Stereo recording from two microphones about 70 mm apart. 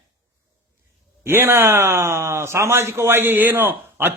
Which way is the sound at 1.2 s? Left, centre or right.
Right.